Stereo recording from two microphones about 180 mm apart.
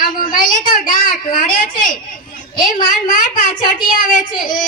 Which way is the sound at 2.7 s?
50° left (ahead or behind).